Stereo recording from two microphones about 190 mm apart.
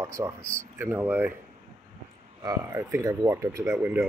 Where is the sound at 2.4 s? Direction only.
20° right (ahead or behind).